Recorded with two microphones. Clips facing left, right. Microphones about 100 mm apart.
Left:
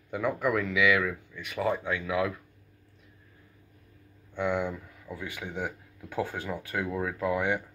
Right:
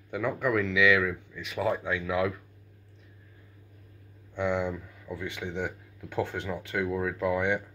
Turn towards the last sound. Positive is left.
turn(degrees=5)  # may be behind; listen again after turning